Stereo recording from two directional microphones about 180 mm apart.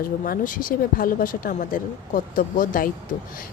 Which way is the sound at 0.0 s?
50° left (ahead or behind).